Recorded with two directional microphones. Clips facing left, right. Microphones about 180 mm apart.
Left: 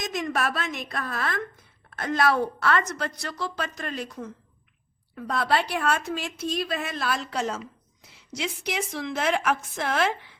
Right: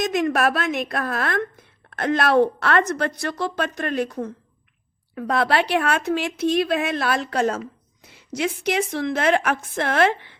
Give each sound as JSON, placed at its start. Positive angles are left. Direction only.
{"t": 0.0, "sound": "a woman's voice", "side_deg": -60}
{"t": 5.3, "sound": "a woman's voice", "side_deg": -70}